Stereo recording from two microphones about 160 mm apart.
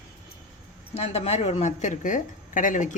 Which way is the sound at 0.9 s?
40° left (ahead or behind).